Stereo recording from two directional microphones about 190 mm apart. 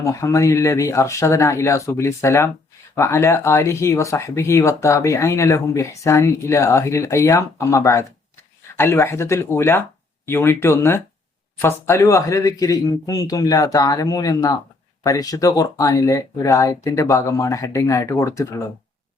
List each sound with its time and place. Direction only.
0.0 s speech: 15° left (ahead or behind)